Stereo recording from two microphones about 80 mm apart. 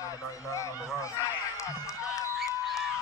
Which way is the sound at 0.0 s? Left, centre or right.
Left.